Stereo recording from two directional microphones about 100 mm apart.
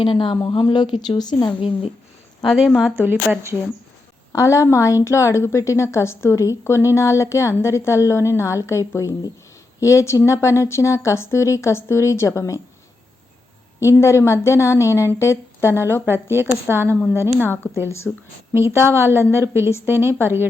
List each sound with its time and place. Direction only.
0.0 s speech: 60° left (ahead or behind); by 1.5 s 45° left (ahead or behind)
2.4 s a woman's voice: centre (ahead or behind)
4.3 s a woman's voice: 30° left (ahead or behind)
13.7 s a woman's voice: 30° left (ahead or behind)
16.0 s speech: 20° right (ahead or behind)
17.5 s a woman's voice: 25° left (ahead or behind)
18.5 s speech: 25° right (ahead or behind)